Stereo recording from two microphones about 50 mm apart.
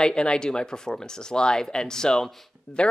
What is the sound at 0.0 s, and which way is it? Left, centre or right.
Speech, centre.